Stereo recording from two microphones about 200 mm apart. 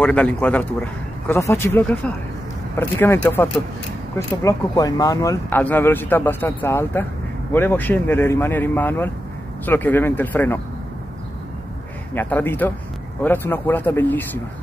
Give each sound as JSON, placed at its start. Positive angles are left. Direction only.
{"t": 0.0, "sound": "speech", "side_deg": 5}
{"t": 12.1, "sound": "speech", "side_deg": 10}